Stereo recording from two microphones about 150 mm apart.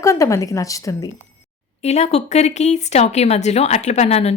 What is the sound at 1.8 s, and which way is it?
Speech, 45° left (ahead or behind).